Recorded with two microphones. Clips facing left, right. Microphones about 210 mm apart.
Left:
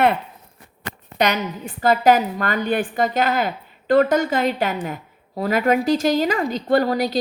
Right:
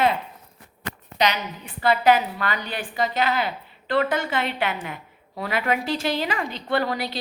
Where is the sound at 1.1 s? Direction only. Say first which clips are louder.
Left 4 dB; 50° left (ahead or behind).